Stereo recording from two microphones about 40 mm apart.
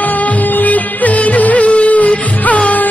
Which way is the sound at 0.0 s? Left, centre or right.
Left.